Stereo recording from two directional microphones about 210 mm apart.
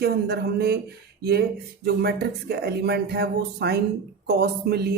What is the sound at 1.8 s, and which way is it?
A man's voice, 50° right (ahead or behind).